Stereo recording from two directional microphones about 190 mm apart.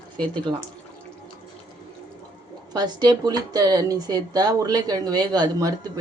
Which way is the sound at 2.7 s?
20° right (ahead or behind).